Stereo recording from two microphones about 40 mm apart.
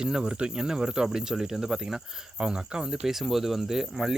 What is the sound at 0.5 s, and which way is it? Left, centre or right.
Speech, centre.